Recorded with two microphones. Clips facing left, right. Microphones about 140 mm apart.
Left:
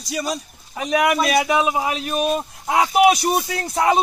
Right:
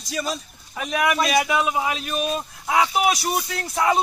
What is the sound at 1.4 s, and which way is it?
Speech, 35° left (ahead or behind).